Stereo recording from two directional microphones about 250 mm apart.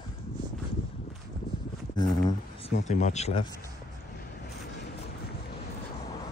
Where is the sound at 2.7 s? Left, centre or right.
Left.